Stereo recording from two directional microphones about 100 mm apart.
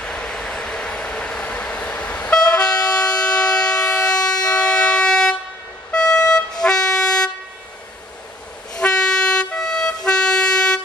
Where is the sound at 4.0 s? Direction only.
40° left (ahead or behind).